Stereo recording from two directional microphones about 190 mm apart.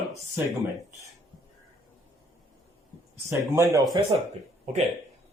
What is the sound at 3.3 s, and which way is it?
Speech, 15° right (ahead or behind).